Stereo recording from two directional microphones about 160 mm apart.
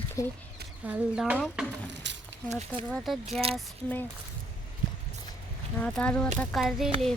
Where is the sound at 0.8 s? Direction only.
10° right (ahead or behind).